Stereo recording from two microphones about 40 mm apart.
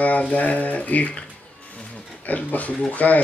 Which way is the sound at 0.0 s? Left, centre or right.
Left.